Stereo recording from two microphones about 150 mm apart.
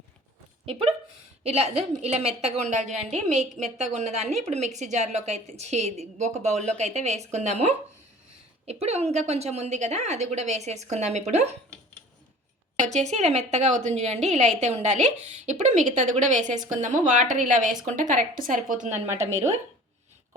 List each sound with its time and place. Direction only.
0.6 s a woman's voice: 40° right (ahead or behind)
12.8 s a woman's voice: 50° right (ahead or behind)
19.0 s a woman's voice: 20° right (ahead or behind)